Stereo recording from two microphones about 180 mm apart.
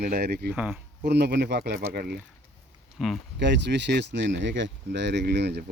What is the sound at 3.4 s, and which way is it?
Speech, 75° right (ahead or behind).